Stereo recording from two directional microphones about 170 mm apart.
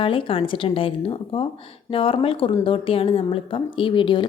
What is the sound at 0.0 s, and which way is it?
A woman's voice, 30° left (ahead or behind).